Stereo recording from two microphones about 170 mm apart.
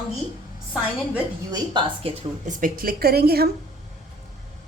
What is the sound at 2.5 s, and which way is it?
A woman's voice, 55° right (ahead or behind).